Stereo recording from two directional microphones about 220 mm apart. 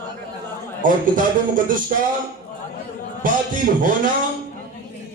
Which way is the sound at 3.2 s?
40° right (ahead or behind).